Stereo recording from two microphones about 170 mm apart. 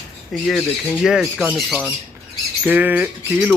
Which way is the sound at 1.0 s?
Centre (ahead or behind).